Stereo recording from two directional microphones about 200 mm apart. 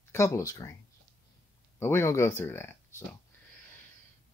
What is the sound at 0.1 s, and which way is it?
Speech, 15° left (ahead or behind).